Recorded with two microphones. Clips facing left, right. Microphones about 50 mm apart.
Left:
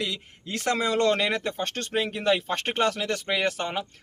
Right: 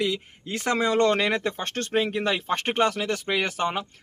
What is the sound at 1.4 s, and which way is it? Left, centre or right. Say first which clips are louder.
Speech: right 1 dB; right.